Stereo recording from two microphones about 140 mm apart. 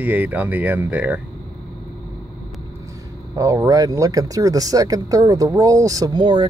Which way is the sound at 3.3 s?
25° right (ahead or behind).